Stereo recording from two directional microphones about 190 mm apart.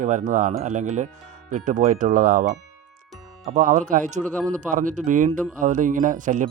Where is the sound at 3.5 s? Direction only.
45° right (ahead or behind).